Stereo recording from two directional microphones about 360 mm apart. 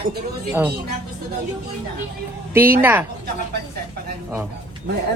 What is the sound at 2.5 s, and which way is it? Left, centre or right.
Speech, centre.